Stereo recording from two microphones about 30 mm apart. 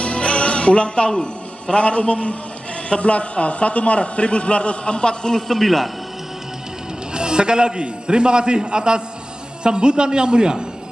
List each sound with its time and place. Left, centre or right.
0.0 s music: left
2.9 s a man's voice: left
5.5 s a man's voice: centre
7.2 s a man's voice: right